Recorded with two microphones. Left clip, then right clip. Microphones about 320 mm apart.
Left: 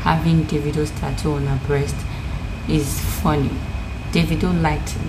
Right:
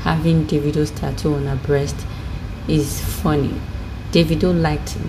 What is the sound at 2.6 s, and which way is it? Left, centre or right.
A woman's voice, centre.